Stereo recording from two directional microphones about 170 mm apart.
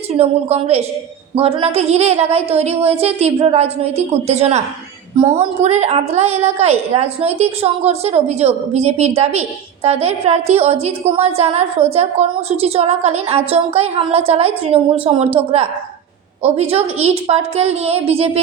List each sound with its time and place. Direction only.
0.1 s a woman's voice: 35° right (ahead or behind)
16.4 s a woman's voice: 35° right (ahead or behind)